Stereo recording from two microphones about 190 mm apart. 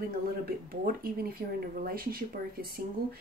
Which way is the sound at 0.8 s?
50° right (ahead or behind).